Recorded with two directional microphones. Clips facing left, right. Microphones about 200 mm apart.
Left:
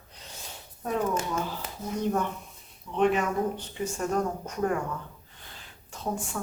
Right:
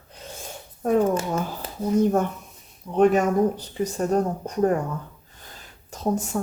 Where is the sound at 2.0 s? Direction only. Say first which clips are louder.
Right 5 dB; 45° right (ahead or behind).